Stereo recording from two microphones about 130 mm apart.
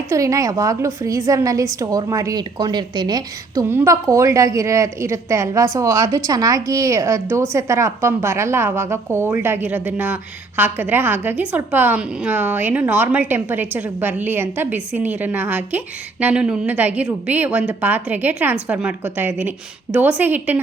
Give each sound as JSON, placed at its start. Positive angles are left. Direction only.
{"t": 0.1, "sound": "a woman's voice", "side_deg": -25}